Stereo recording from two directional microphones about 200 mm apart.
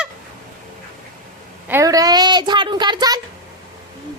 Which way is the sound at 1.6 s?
15° right (ahead or behind).